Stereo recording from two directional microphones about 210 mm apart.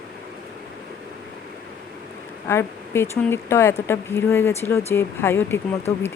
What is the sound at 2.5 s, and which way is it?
Speech, 10° left (ahead or behind).